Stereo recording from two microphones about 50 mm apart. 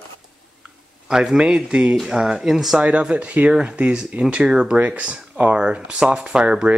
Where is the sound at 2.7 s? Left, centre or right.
Centre.